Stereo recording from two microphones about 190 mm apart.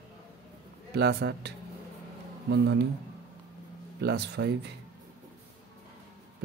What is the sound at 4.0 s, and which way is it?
Speech, 60° right (ahead or behind).